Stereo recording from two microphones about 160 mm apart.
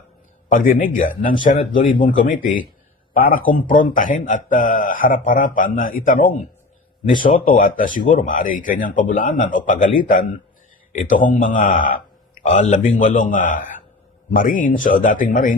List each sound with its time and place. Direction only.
0.5 s speech: 55° left (ahead or behind)